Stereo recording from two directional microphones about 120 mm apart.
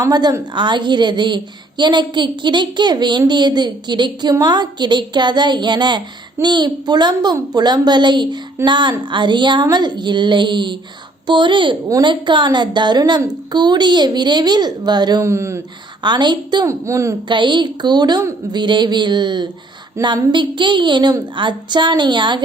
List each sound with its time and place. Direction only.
0.0 s a woman's voice: 35° right (ahead or behind)
15.2 s a woman's voice: 25° right (ahead or behind)
16.0 s a woman's voice: 40° right (ahead or behind)
16.6 s a woman's voice: 25° right (ahead or behind)
17.2 s a woman's voice: 40° right (ahead or behind)
20.0 s a woman's voice: 25° right (ahead or behind)
20.3 s a woman's voice: 40° right (ahead or behind)